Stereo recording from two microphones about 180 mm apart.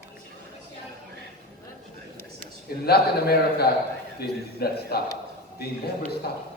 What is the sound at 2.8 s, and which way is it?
A man's voice, 60° left (ahead or behind).